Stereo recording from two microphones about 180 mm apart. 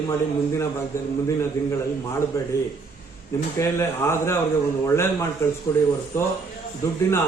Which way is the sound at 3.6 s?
15° left (ahead or behind).